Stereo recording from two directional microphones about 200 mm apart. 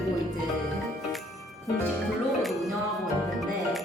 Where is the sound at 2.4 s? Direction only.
Centre (ahead or behind).